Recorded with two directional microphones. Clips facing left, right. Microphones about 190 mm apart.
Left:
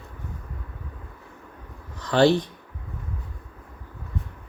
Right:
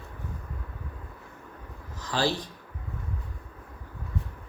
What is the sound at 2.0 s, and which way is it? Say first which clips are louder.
Speech: left 10 dB; 65° left (ahead or behind).